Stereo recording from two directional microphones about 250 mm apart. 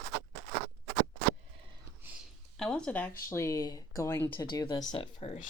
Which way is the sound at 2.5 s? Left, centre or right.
Centre.